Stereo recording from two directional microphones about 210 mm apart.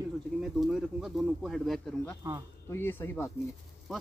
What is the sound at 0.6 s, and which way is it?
Speech, centre (ahead or behind).